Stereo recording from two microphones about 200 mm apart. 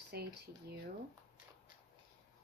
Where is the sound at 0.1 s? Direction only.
50° right (ahead or behind).